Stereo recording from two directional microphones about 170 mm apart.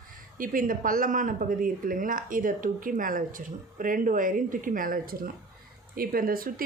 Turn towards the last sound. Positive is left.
turn(degrees=-60)  # may be behind; listen again after turning